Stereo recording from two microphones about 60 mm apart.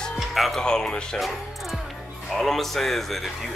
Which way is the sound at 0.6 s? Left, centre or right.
Centre.